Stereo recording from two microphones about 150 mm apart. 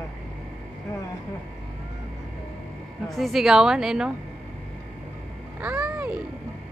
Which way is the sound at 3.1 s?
Centre (ahead or behind).